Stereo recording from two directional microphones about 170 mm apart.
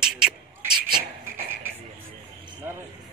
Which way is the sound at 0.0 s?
5° right (ahead or behind).